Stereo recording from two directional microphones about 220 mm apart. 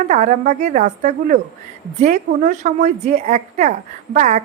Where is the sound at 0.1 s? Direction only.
35° right (ahead or behind).